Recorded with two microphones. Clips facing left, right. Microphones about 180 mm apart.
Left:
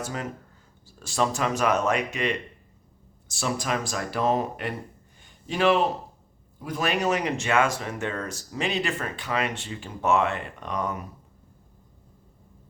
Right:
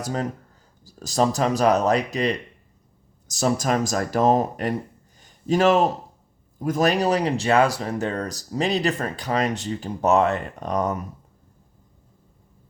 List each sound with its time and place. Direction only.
0.0 s a man's voice: 35° right (ahead or behind)